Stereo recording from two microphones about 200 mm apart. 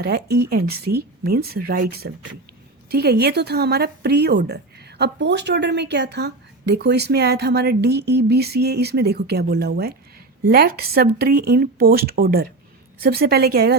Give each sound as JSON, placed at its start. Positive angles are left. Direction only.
{"t": 0.0, "sound": "speech", "side_deg": -50}